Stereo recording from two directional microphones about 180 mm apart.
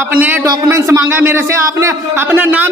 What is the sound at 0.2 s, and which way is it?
A man's voice, 15° right (ahead or behind).